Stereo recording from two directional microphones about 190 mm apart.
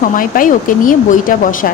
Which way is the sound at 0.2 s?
45° left (ahead or behind).